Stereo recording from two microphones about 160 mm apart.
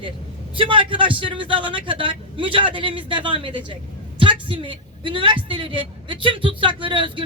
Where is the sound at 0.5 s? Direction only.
35° right (ahead or behind).